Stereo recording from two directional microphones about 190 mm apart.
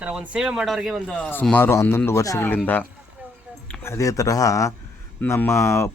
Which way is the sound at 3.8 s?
15° left (ahead or behind).